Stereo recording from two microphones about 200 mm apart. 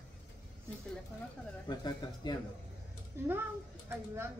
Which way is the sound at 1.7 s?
20° left (ahead or behind).